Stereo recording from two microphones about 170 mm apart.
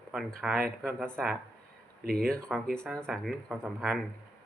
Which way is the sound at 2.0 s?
60° right (ahead or behind).